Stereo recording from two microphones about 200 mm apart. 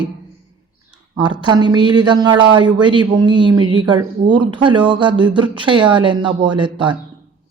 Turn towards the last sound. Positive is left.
turn(degrees=-25)  # may be behind; listen again after turning